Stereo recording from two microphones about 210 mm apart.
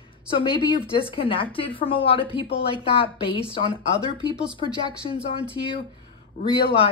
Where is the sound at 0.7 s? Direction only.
25° left (ahead or behind).